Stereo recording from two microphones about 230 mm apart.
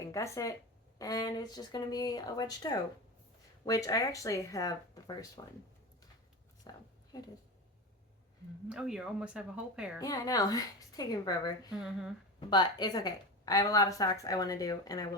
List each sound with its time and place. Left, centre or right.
0.0 s a woman's voice: centre
6.7 s a sound: centre
8.7 s speech: centre
10.0 s a woman's voice: centre
11.8 s speech: centre
12.4 s a woman's voice: centre